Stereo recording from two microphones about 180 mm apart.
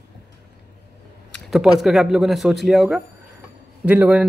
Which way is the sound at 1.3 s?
Centre (ahead or behind).